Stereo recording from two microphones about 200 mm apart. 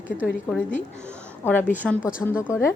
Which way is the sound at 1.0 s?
10° left (ahead or behind).